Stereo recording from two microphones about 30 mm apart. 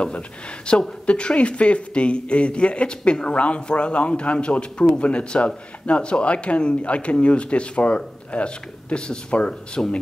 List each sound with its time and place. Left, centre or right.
0.7 s speech: left